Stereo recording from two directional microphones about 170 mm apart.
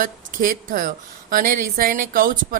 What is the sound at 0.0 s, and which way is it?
A woman's voice, 55° right (ahead or behind).